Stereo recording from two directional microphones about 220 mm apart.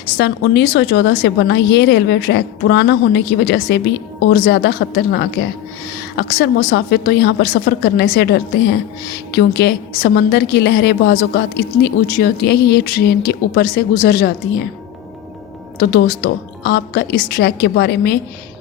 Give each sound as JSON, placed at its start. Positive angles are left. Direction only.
{"t": 0.2, "sound": "a woman's voice", "side_deg": 50}
{"t": 15.8, "sound": "a woman's voice", "side_deg": 45}